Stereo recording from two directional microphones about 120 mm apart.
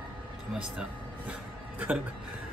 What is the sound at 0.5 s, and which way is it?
Speech, 5° right (ahead or behind).